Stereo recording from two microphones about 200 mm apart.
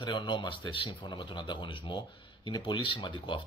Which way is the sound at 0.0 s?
25° left (ahead or behind).